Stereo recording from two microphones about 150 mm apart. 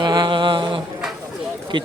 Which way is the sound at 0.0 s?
30° right (ahead or behind).